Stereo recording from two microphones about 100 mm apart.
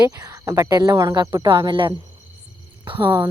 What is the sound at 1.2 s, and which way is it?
Speech, 50° right (ahead or behind).